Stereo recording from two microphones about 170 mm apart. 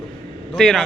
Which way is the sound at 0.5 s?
Centre (ahead or behind).